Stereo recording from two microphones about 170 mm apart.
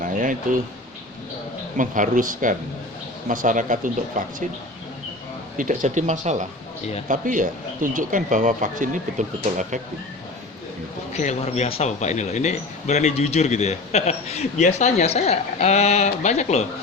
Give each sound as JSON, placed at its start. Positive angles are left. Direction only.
{"t": 0.0, "sound": "a sound", "side_deg": -50}
{"t": 1.8, "sound": "speech", "side_deg": -50}
{"t": 5.5, "sound": "speech", "side_deg": -50}
{"t": 11.1, "sound": "speech", "side_deg": 40}